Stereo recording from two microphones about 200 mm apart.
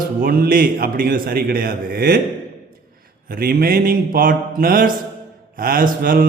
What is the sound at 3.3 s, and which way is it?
A man's voice, 45° right (ahead or behind).